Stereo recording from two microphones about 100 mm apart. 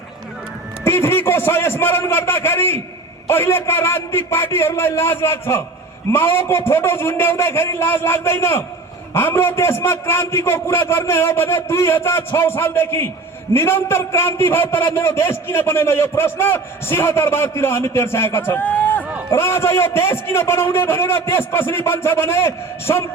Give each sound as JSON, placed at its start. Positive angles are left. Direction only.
{"t": 0.9, "sound": "a man's voice", "side_deg": 25}
{"t": 19.3, "sound": "a man's voice", "side_deg": 25}